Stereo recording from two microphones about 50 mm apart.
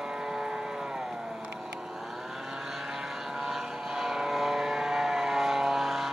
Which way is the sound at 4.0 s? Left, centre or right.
Centre.